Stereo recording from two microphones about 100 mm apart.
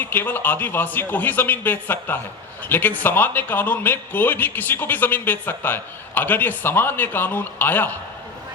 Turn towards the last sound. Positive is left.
turn(degrees=20)  # may be behind; listen again after turning